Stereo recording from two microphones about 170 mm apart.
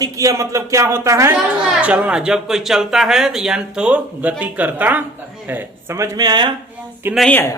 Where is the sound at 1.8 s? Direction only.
5° right (ahead or behind); by 6.5 s 25° right (ahead or behind).